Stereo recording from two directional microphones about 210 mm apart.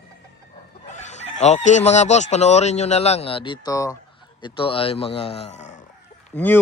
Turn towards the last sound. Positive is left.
turn(degrees=10)  # may be behind; listen again after turning